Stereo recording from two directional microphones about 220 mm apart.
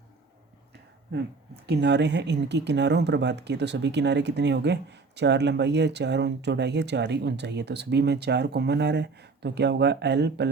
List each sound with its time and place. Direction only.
1.1 s speech: 55° right (ahead or behind)